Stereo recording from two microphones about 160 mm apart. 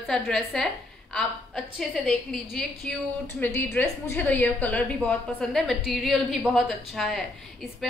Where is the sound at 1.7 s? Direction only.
5° left (ahead or behind).